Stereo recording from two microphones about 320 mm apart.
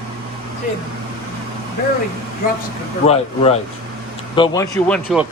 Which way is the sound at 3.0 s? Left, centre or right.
Centre.